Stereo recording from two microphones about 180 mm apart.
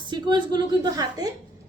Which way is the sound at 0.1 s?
25° right (ahead or behind).